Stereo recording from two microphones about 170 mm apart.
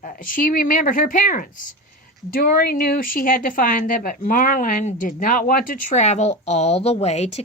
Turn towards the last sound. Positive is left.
turn(degrees=40)  # may be behind; listen again after turning